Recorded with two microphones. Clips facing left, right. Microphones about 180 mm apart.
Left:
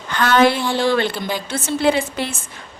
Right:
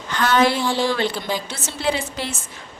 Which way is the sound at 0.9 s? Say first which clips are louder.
Left 3 dB; 60° left (ahead or behind).